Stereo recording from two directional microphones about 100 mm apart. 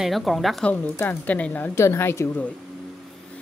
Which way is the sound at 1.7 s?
25° left (ahead or behind).